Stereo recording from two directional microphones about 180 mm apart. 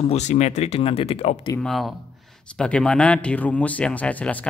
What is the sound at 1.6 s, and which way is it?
Speech, centre (ahead or behind).